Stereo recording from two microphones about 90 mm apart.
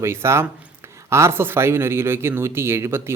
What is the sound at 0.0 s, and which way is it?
Speech, 30° right (ahead or behind).